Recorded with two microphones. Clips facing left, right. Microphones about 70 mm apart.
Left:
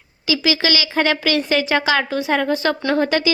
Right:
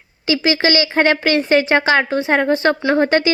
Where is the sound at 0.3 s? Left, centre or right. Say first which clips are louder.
Right 3 dB; right.